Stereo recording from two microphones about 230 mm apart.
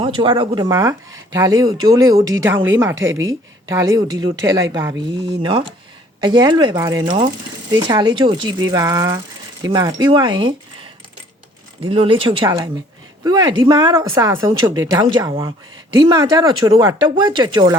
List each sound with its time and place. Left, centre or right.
0.0 s speech: right
11.9 s speech: right